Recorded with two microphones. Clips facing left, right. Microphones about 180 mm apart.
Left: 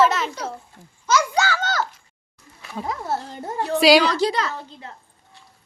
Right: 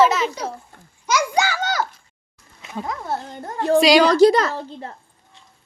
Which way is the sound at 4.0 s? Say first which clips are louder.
Right 8 dB; 45° right (ahead or behind).